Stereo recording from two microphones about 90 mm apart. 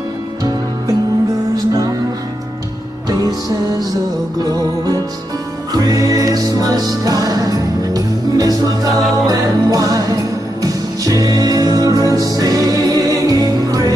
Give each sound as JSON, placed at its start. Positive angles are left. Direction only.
{"t": 0.4, "sound": "music", "side_deg": -45}
{"t": 4.5, "sound": "music", "side_deg": -45}